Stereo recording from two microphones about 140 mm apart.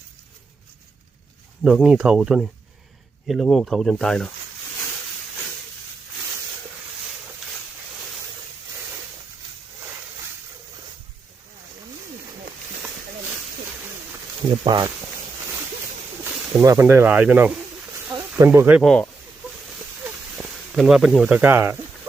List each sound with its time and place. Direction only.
1.6 s speech: 5° right (ahead or behind)
14.6 s speech: 30° right (ahead or behind)
16.6 s speech: 20° right (ahead or behind)
17.9 s snake: 20° right (ahead or behind)
18.8 s speech: 5° left (ahead or behind)
19.7 s snake: 5° right (ahead or behind)